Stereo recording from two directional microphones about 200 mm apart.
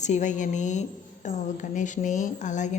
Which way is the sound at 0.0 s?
35° left (ahead or behind).